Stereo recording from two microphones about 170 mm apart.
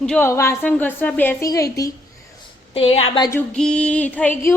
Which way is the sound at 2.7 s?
35° left (ahead or behind).